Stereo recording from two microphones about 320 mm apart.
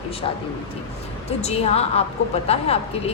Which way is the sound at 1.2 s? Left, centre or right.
Centre.